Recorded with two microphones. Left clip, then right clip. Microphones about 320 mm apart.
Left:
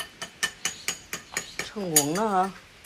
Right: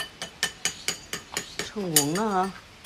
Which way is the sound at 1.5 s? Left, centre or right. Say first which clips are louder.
Even; centre.